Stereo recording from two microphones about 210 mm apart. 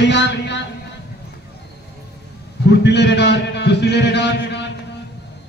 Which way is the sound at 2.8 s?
55° left (ahead or behind).